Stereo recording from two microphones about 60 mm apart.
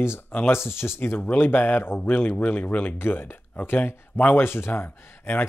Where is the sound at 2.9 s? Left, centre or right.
Left.